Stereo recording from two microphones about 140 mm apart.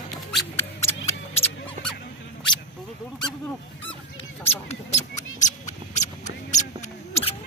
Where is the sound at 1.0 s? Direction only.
50° left (ahead or behind).